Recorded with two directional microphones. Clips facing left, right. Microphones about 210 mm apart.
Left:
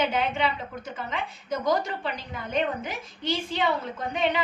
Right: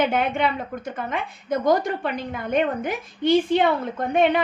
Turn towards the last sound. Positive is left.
turn(degrees=-55)  # may be behind; listen again after turning